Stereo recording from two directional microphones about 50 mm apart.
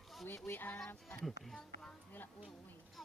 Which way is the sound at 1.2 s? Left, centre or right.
Centre.